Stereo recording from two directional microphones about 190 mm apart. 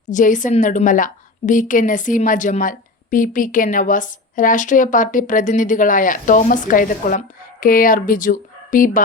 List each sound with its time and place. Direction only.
0.1 s a woman's voice: 40° left (ahead or behind)